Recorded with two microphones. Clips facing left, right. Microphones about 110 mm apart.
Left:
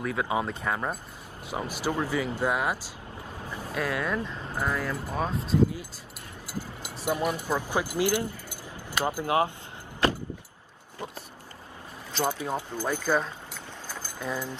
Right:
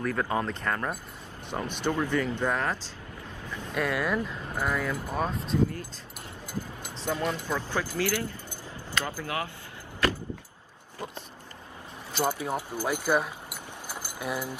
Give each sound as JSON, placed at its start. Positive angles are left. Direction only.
{"t": 0.0, "sound": "speech", "side_deg": 5}
{"t": 3.7, "sound": "speech", "side_deg": 0}
{"t": 12.1, "sound": "speech", "side_deg": -10}